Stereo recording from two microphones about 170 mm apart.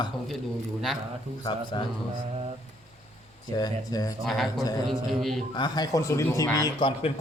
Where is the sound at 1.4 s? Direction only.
25° left (ahead or behind).